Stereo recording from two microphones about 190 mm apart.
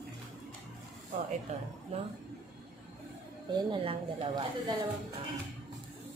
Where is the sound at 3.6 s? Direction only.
25° right (ahead or behind).